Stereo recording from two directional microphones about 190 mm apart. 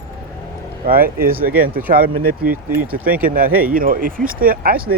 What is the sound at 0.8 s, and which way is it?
Speech, 50° right (ahead or behind).